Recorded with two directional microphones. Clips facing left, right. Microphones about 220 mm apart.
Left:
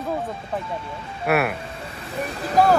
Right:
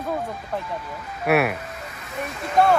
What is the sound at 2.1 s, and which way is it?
Speech, 35° left (ahead or behind).